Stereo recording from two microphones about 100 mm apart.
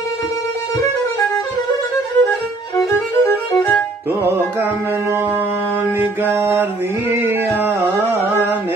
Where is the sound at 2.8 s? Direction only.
20° left (ahead or behind).